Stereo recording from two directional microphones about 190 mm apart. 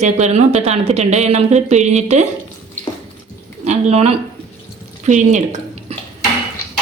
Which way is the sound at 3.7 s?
35° right (ahead or behind).